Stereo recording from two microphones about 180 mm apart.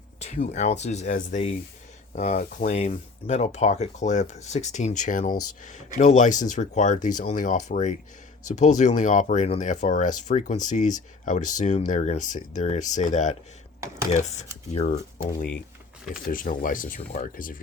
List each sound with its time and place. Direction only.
0.2 s speech: 40° left (ahead or behind)
14.7 s speech: 35° left (ahead or behind)
16.2 s speech: 50° left (ahead or behind)